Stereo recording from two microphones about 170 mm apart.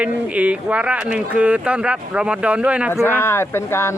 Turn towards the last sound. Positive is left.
turn(degrees=15)  # may be behind; listen again after turning